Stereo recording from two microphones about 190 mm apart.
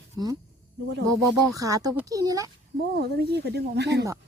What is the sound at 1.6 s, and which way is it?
Speech, 20° right (ahead or behind).